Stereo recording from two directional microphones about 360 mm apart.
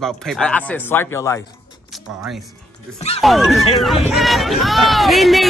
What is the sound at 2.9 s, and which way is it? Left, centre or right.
Speech, centre.